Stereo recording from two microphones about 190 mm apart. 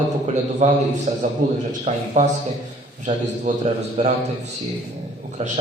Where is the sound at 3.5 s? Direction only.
40° right (ahead or behind).